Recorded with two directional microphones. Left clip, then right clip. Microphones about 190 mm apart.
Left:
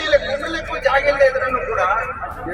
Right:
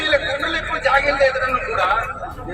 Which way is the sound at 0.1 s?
20° left (ahead or behind).